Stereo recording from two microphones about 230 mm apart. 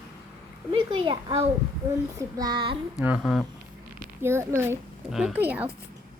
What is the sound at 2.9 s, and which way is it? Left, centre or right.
A child's voice, centre.